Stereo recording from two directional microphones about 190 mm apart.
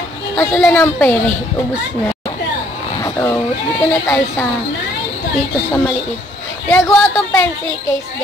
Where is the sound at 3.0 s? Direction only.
15° left (ahead or behind).